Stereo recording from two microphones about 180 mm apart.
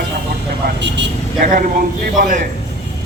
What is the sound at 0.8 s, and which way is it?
Vehicle, 75° right (ahead or behind).